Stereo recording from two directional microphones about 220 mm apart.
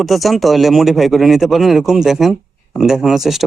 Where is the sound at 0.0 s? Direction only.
Centre (ahead or behind).